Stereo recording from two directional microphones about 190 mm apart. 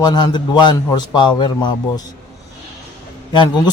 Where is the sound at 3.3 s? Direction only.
25° left (ahead or behind).